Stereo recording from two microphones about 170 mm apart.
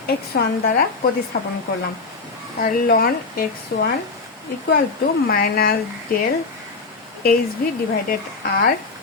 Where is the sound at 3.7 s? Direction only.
75° left (ahead or behind).